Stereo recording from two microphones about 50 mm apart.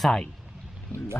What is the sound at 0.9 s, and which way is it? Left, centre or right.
Speech, left.